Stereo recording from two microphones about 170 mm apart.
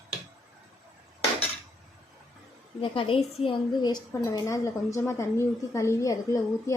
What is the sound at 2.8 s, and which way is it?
A woman's voice, 30° left (ahead or behind).